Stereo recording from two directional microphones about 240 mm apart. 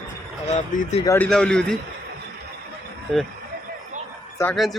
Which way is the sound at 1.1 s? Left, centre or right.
Centre.